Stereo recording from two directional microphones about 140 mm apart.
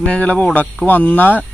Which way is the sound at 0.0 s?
10° left (ahead or behind).